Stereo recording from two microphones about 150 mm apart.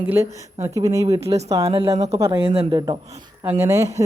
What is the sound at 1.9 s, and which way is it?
Speech, 45° right (ahead or behind).